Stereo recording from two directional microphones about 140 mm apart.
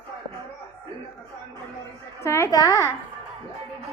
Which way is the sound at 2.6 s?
20° right (ahead or behind).